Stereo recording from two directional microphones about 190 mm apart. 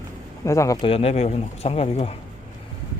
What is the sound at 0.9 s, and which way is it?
Speech, 30° left (ahead or behind).